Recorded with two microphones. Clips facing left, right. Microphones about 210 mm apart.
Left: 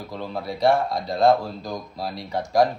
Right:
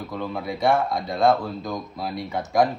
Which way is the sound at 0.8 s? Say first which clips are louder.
Left 1 dB; centre (ahead or behind).